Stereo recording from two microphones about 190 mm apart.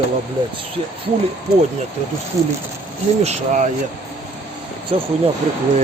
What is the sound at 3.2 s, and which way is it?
Speech, 35° right (ahead or behind).